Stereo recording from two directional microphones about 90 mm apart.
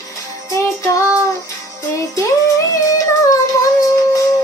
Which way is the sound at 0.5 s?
35° left (ahead or behind).